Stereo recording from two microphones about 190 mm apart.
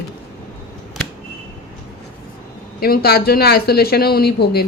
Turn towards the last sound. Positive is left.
turn(degrees=55)  # may be behind; listen again after turning